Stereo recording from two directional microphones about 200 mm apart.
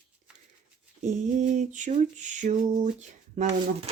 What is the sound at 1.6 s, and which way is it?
Speech, 35° right (ahead or behind).